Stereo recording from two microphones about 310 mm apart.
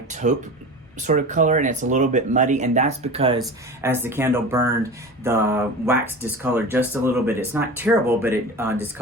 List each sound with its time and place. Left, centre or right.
0.1 s speech: right; by 8.7 s centre